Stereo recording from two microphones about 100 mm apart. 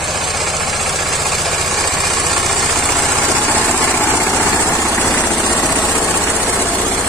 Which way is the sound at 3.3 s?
15° right (ahead or behind).